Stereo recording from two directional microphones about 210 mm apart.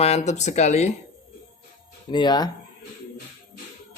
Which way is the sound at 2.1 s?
20° left (ahead or behind).